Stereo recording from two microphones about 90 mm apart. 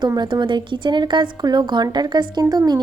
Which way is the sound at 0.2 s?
60° right (ahead or behind).